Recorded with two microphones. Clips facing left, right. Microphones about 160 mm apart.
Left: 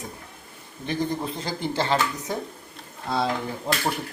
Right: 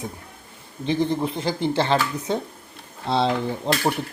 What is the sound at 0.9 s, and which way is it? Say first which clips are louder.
Speech: right 5 dB; 20° right (ahead or behind).